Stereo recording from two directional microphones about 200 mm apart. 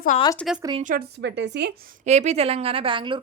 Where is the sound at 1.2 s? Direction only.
60° right (ahead or behind).